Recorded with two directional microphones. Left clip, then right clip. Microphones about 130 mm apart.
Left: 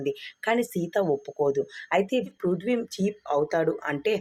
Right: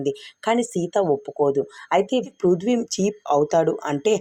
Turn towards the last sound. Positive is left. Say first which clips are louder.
# right 6 dB
turn(degrees=-40)  # may be behind; listen again after turning